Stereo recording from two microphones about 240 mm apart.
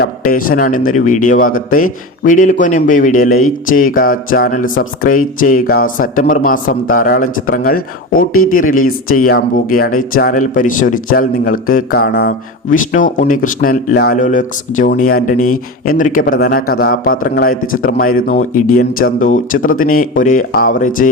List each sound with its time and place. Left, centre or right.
0.0 s a man's voice: left